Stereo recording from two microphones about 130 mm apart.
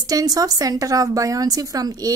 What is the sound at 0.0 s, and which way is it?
A woman's voice, 30° right (ahead or behind).